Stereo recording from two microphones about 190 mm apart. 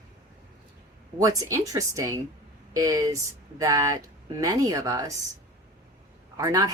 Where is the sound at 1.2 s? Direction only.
15° right (ahead or behind).